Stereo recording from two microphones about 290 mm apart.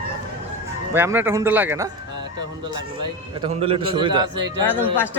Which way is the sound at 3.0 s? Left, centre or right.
Centre.